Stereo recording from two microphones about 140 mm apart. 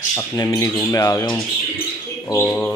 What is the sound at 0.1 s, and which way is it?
Speech, 25° left (ahead or behind).